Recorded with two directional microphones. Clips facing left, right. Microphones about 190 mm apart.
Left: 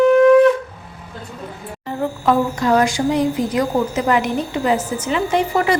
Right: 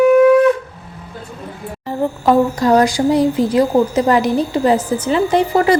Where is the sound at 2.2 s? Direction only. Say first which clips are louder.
Right 4 dB; 35° right (ahead or behind).